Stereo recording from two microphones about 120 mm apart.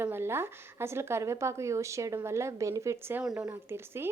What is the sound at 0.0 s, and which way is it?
Speech, 20° right (ahead or behind).